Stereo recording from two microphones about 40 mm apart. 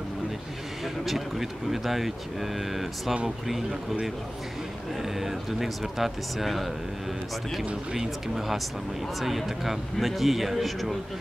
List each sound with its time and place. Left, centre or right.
1.0 s speech: centre
5.0 s speech: centre
7.9 s speech: centre